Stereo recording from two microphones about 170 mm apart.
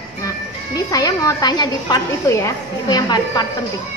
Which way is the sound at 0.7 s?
20° left (ahead or behind).